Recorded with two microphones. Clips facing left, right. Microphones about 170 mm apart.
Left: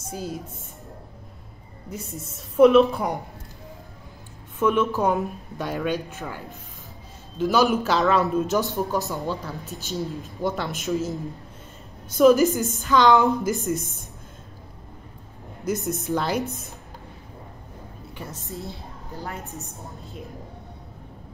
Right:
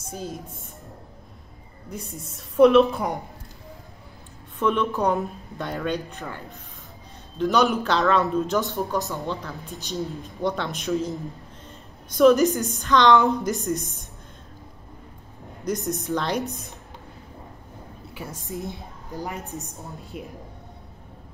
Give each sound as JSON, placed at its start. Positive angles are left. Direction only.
{"t": 0.1, "sound": "speech", "side_deg": 5}
{"t": 1.9, "sound": "a woman's voice", "side_deg": 5}
{"t": 4.6, "sound": "a woman's voice", "side_deg": 5}
{"t": 15.6, "sound": "a woman's voice", "side_deg": 5}
{"t": 18.1, "sound": "a woman's voice", "side_deg": -10}